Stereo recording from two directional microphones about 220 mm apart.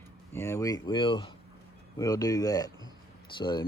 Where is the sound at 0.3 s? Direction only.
10° left (ahead or behind).